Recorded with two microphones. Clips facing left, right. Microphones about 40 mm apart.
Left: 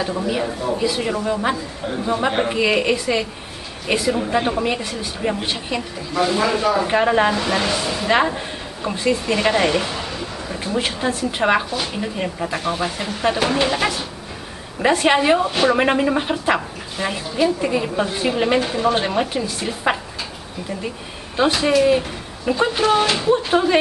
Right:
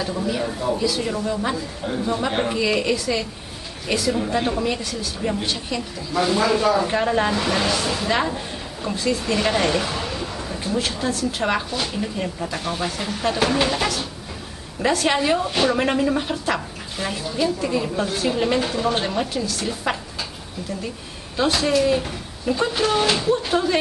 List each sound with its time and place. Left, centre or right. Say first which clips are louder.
0.0 s speech: left 2 dB; centre
0.5 s speech: left 1 dB; centre
0.7 s a woman's voice: left 2 dB; left
6.1 s speech: left 1 dB; centre
7.3 s speech: left 1 dB; centre
8.1 s a woman's voice: left 8 dB; left; by 10.3 s centre
10.5 s a woman's voice: left 2 dB; centre
19.0 s a woman's voice: left 3 dB; left
21.6 s a woman's voice: left 3 dB; centre
23.3 s a woman's voice: left 4 dB; left